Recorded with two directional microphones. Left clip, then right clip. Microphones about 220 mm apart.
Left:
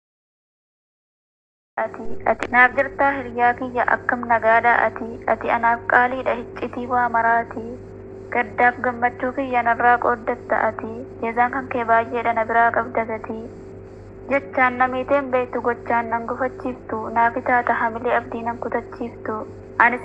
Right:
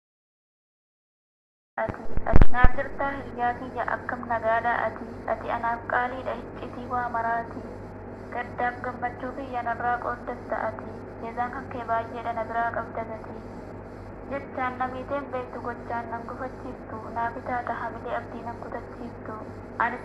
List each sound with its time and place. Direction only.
1.8 s a woman's voice: 40° left (ahead or behind)
14.3 s a woman's voice: 40° left (ahead or behind)